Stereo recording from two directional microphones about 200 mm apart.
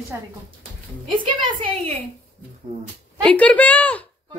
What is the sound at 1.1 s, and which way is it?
Speech, 25° right (ahead or behind).